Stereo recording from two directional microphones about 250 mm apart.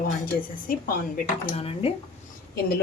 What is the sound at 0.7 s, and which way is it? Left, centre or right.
Speech, left.